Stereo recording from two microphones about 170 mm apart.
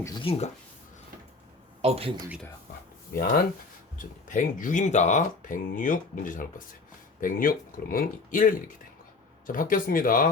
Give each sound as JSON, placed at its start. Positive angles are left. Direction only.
{"t": 0.0, "sound": "speech", "side_deg": 25}
{"t": 1.8, "sound": "speech", "side_deg": -35}
{"t": 3.1, "sound": "speech", "side_deg": 65}
{"t": 3.9, "sound": "speech", "side_deg": 50}